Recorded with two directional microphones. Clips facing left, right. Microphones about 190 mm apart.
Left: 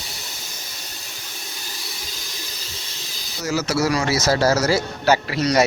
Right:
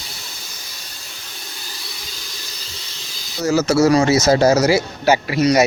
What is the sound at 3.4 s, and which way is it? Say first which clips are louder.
A man's voice: right 7 dB; 25° right (ahead or behind).